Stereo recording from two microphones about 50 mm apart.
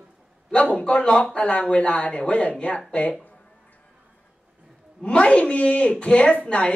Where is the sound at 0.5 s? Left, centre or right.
Centre.